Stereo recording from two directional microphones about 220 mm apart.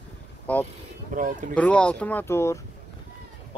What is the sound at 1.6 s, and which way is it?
Speech, 5° left (ahead or behind).